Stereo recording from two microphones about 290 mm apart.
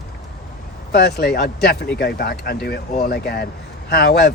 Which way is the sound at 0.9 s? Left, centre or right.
Left.